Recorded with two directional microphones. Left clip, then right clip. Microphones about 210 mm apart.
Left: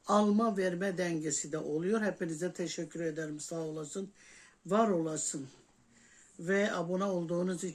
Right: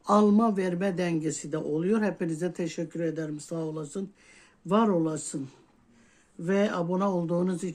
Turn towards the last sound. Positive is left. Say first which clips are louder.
# right 5 dB
turn(degrees=-35)  # may be behind; listen again after turning